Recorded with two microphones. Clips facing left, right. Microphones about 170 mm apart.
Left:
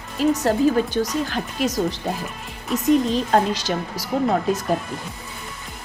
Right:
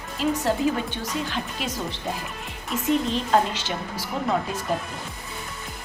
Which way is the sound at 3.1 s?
40° left (ahead or behind).